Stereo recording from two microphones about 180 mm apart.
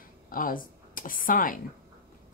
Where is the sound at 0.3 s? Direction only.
50° left (ahead or behind).